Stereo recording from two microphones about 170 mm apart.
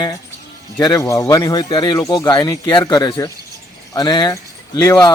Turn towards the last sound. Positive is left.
turn(degrees=20)  # may be behind; listen again after turning